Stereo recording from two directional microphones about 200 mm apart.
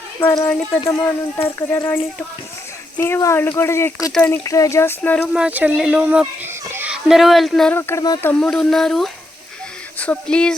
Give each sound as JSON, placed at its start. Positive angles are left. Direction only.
{"t": 0.2, "sound": "speech", "side_deg": 15}
{"t": 3.0, "sound": "speech", "side_deg": 15}
{"t": 5.3, "sound": "speech", "side_deg": -5}
{"t": 8.3, "sound": "speech", "side_deg": 5}